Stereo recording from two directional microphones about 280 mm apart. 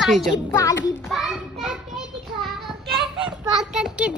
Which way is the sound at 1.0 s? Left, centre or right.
Centre.